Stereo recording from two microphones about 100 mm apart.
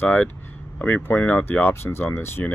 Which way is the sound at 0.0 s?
15° left (ahead or behind).